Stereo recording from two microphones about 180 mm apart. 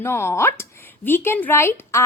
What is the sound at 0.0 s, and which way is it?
A woman's voice, 15° left (ahead or behind).